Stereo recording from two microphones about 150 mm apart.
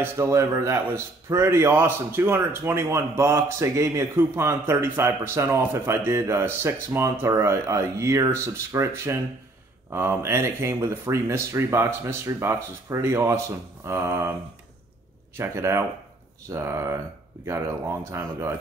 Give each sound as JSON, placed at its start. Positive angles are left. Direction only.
{"t": 0.0, "sound": "a man's voice", "side_deg": -20}
{"t": 15.3, "sound": "a man's voice", "side_deg": -20}